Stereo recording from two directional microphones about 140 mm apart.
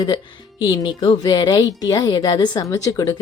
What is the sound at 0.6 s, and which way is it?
A woman's voice, 30° left (ahead or behind).